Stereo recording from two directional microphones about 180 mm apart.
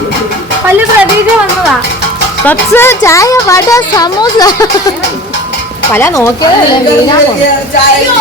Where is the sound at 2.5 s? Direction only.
15° left (ahead or behind).